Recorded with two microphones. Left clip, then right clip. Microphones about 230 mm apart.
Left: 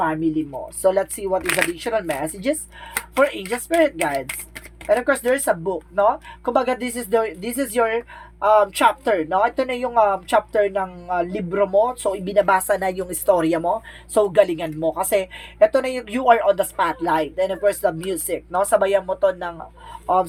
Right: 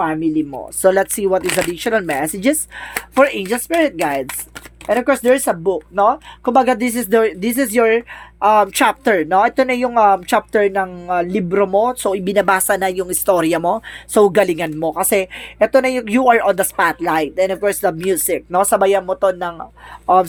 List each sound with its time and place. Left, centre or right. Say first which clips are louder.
0.8 s speech: right 5 dB; right